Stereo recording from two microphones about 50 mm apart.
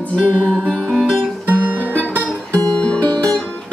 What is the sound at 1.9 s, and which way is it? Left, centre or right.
Music, left.